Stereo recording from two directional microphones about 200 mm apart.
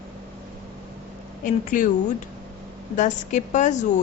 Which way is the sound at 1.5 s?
40° left (ahead or behind).